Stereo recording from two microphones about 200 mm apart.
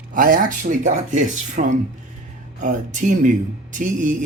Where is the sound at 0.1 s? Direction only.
45° right (ahead or behind).